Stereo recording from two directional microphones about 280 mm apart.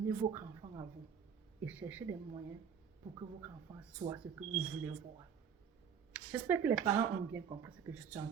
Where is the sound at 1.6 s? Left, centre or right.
Centre.